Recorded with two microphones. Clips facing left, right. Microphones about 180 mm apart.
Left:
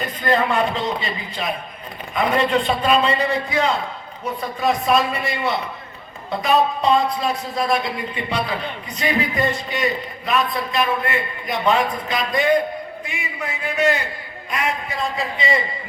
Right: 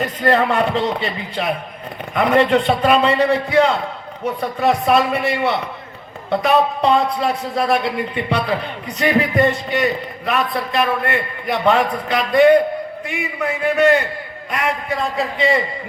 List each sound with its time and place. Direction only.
0.0 s a man's voice: 70° right (ahead or behind)